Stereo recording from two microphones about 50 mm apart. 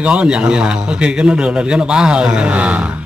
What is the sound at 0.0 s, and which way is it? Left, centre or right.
A man's voice, right.